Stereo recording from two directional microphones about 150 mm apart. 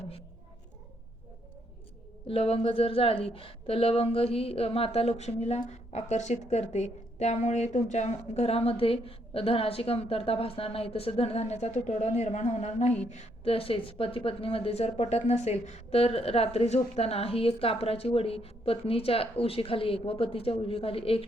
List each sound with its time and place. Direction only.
2.2 s a woman's voice: 40° left (ahead or behind)